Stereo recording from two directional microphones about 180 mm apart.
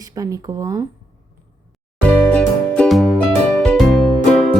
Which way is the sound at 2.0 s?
5° left (ahead or behind).